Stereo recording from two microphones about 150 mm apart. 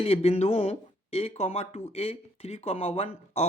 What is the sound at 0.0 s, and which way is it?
Speech, 40° left (ahead or behind).